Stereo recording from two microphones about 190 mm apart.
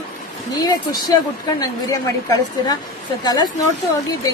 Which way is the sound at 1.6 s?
20° left (ahead or behind).